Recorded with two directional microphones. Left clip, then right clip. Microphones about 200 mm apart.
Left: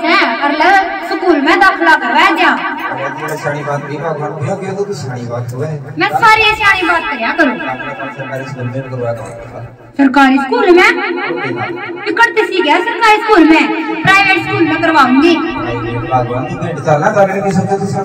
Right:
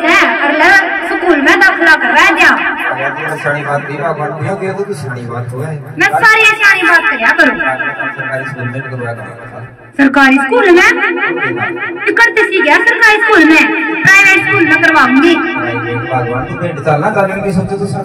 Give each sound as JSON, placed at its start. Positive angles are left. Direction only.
{"t": 0.1, "sound": "a sound", "side_deg": -20}
{"t": 5.9, "sound": "a woman's voice", "side_deg": -20}
{"t": 9.9, "sound": "a woman's voice", "side_deg": -25}